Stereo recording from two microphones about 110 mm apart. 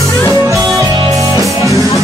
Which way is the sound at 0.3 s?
25° right (ahead or behind).